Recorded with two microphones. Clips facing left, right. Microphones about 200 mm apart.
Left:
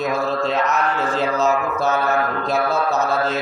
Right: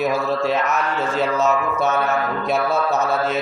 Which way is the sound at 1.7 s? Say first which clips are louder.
Left 1 dB; 25° right (ahead or behind).